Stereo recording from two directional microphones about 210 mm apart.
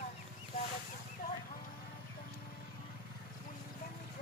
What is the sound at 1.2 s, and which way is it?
Clip-clop, 45° left (ahead or behind).